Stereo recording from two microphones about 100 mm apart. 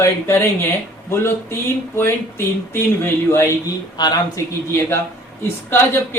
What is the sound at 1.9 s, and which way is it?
Speech, 25° left (ahead or behind).